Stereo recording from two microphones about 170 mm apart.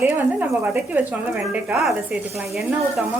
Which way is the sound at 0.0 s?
10° right (ahead or behind).